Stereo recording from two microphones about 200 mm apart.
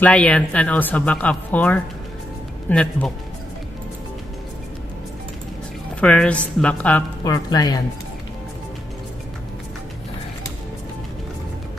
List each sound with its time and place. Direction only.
0.0 s speech: 5° left (ahead or behind)
5.9 s speech: 5° left (ahead or behind)
7.2 s speech: 20° left (ahead or behind)